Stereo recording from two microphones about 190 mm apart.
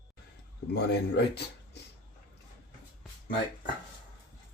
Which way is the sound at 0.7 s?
60° left (ahead or behind).